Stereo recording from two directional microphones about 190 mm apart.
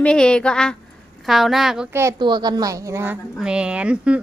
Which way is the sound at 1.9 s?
20° right (ahead or behind).